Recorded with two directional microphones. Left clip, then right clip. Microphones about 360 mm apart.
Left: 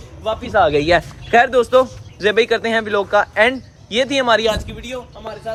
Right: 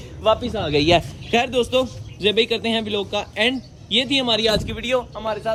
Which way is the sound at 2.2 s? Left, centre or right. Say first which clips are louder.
Left 4 dB; centre.